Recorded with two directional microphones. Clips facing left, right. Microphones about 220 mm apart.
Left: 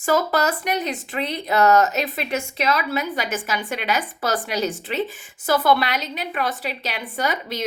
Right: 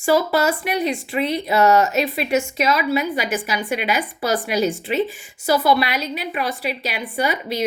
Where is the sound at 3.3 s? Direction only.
15° right (ahead or behind).